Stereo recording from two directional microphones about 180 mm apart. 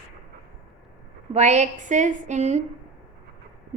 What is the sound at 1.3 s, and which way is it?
A woman's voice, 40° right (ahead or behind).